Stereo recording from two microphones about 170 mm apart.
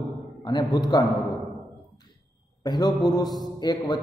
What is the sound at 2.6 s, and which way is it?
A man's voice, 25° left (ahead or behind).